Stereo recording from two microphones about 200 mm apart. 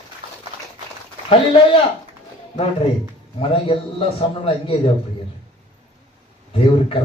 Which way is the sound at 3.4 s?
25° left (ahead or behind).